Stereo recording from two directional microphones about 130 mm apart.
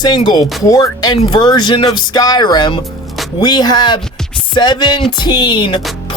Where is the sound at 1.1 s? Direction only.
40° left (ahead or behind).